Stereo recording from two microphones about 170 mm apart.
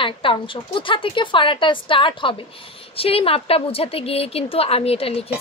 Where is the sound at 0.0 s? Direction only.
30° left (ahead or behind).